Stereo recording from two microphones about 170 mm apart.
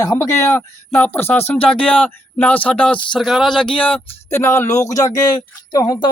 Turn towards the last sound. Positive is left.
turn(degrees=20)  # may be behind; listen again after turning